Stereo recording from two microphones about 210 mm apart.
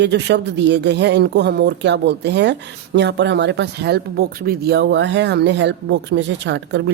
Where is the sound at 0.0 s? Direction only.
55° right (ahead or behind).